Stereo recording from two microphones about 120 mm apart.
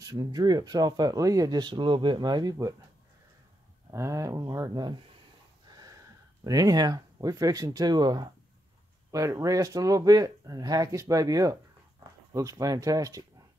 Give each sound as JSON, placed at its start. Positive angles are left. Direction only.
{"t": 0.0, "sound": "speech", "side_deg": -35}
{"t": 3.9, "sound": "speech", "side_deg": -25}